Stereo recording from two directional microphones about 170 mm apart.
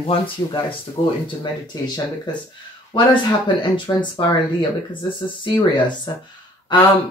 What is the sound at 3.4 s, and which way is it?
Speech, 30° left (ahead or behind).